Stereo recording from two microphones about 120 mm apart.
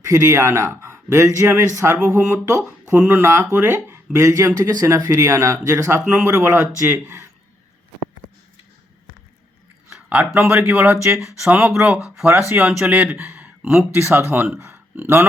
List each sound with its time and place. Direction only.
0.0 s a man's voice: 25° right (ahead or behind)
6.1 s speech: 10° right (ahead or behind)
6.3 s a man's voice: 20° right (ahead or behind)
9.9 s a man's voice: 15° right (ahead or behind)
12.6 s speech: 5° right (ahead or behind)